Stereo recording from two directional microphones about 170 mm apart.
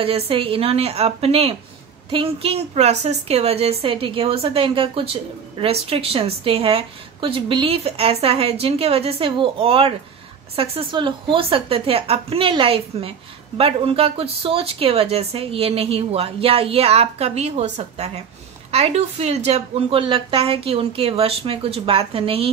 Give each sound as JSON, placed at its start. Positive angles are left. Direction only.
{"t": 0.0, "sound": "a woman's voice", "side_deg": -35}